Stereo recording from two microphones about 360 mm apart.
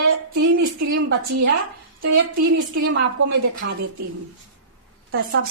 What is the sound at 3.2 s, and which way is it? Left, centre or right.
Speech, right.